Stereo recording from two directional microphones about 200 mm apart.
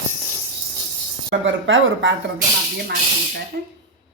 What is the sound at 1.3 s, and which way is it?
Speech, 70° right (ahead or behind).